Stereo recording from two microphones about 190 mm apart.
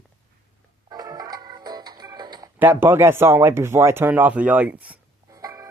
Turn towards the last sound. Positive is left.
turn(degrees=-20)  # may be behind; listen again after turning